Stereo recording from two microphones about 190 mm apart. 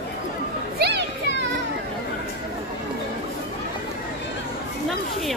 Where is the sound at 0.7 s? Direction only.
60° right (ahead or behind).